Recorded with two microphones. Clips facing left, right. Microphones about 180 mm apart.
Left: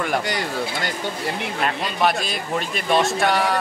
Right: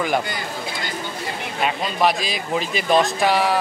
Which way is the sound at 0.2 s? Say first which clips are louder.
Left 3 dB; 75° left (ahead or behind).